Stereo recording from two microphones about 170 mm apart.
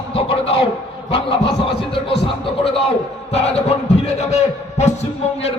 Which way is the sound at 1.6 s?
35° left (ahead or behind).